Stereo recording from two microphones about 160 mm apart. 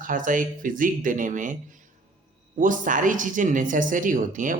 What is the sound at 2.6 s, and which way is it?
Speech, 55° right (ahead or behind).